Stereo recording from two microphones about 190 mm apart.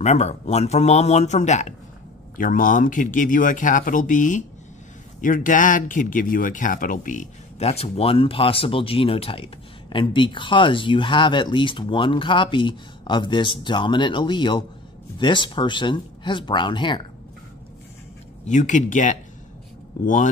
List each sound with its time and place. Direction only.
0.0 s speech: 35° left (ahead or behind)
18.4 s speech: 40° left (ahead or behind)